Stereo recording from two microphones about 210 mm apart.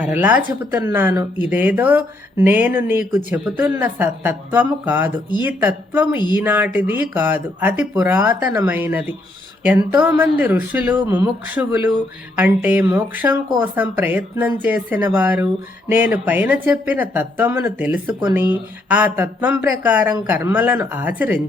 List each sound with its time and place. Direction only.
0.0 s speech: 5° right (ahead or behind)
6.1 s speech: 20° left (ahead or behind)
6.4 s speech: 10° right (ahead or behind)